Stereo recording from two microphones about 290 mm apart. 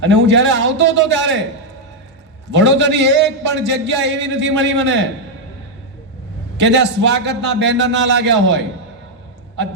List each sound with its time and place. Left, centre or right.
0.1 s a man's voice: right
2.5 s a man's voice: right
6.6 s a man's voice: right